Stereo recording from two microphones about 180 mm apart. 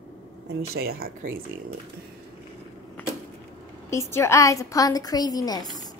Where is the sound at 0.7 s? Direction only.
60° right (ahead or behind).